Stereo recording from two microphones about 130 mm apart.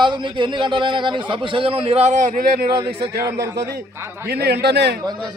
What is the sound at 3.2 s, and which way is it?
Speech, 25° right (ahead or behind).